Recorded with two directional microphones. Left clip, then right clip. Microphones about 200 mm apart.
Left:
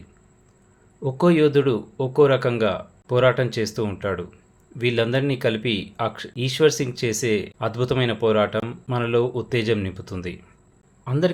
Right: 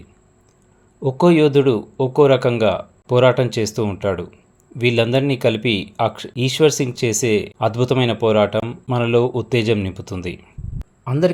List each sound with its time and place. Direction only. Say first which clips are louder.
1.0 s a man's voice: right 4 dB; 15° right (ahead or behind)